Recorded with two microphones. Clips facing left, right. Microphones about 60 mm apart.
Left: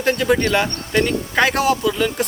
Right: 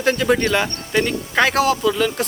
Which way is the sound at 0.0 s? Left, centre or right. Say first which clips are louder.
Even; centre.